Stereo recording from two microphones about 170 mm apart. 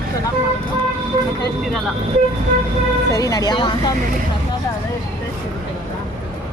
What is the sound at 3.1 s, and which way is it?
Speech, 20° left (ahead or behind).